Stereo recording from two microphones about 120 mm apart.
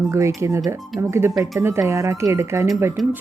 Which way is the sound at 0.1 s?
25° right (ahead or behind).